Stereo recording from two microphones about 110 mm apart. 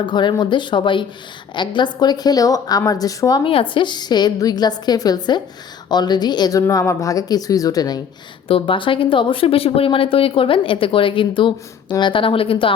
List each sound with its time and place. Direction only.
0.0 s speech: 45° left (ahead or behind)
3.4 s speech: 55° left (ahead or behind); by 8.0 s 35° left (ahead or behind)
8.4 s speech: 55° left (ahead or behind)